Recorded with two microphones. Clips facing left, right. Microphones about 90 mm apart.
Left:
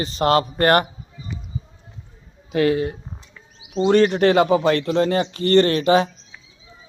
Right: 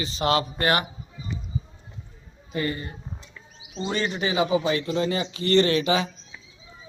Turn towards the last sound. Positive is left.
turn(degrees=50)  # may be behind; listen again after turning